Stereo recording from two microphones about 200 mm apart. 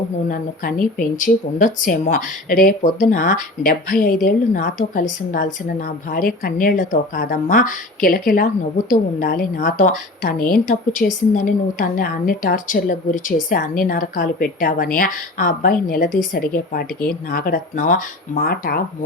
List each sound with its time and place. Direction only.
0.3 s a woman's voice: 40° left (ahead or behind)